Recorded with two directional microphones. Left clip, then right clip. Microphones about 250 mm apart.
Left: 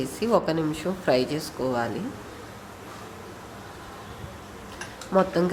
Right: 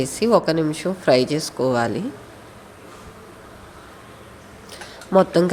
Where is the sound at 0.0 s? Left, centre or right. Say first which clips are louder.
Right 6 dB; centre.